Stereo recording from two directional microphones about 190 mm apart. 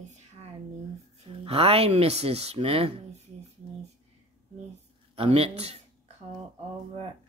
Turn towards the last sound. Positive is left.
turn(degrees=-30)  # may be behind; listen again after turning